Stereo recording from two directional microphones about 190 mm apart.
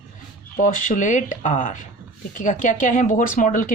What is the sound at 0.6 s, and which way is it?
Speech, 45° left (ahead or behind).